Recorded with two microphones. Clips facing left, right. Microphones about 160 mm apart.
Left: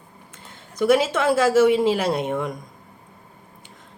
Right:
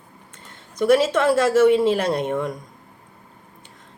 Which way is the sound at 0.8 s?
10° left (ahead or behind).